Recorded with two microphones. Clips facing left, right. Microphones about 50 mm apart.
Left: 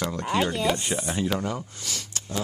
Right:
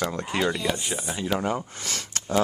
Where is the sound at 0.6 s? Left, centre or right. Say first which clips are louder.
Left 3 dB; left.